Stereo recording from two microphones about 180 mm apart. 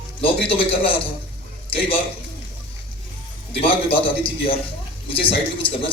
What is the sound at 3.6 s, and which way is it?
A man's voice, 30° left (ahead or behind).